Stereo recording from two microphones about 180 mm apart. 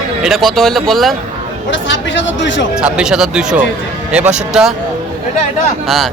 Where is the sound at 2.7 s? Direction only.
5° right (ahead or behind).